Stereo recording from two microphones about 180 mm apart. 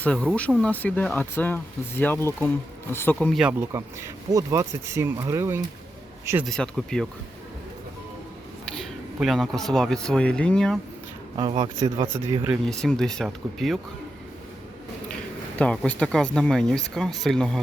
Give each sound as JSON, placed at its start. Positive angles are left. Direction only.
{"t": 0.0, "sound": "speech", "side_deg": 5}
{"t": 3.7, "sound": "speech", "side_deg": -15}
{"t": 6.4, "sound": "speech", "side_deg": 5}
{"t": 9.1, "sound": "speech", "side_deg": 0}
{"t": 11.8, "sound": "speech", "side_deg": -20}
{"t": 12.6, "sound": "speech", "side_deg": 5}
{"t": 15.5, "sound": "speech", "side_deg": 5}